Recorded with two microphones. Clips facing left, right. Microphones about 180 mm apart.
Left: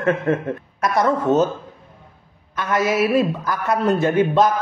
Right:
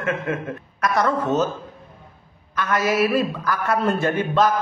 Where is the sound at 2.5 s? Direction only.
25° left (ahead or behind).